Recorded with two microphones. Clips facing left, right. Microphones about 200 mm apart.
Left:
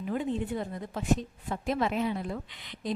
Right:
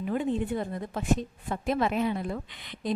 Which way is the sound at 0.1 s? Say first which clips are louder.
Right 2 dB; 55° right (ahead or behind).